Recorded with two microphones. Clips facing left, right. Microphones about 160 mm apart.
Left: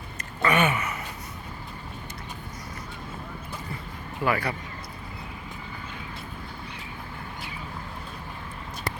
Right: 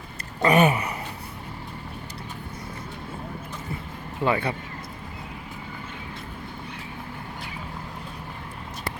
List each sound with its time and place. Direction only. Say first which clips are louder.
0.4 s gasp: right 4 dB; 35° right (ahead or behind)
4.2 s speech: right 2 dB; 25° right (ahead or behind)